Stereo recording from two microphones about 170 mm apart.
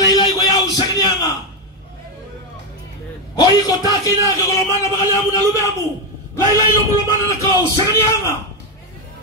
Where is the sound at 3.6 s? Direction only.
20° left (ahead or behind).